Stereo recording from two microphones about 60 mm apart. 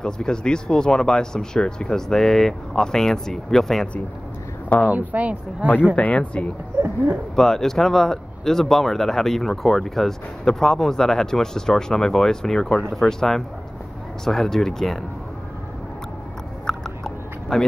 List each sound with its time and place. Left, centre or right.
0.0 s speech: centre
4.8 s speech: right
5.9 s speech: left
7.3 s speech: centre
16.6 s chewing: centre